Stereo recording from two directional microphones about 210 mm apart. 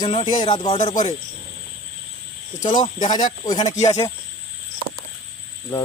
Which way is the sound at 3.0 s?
35° left (ahead or behind).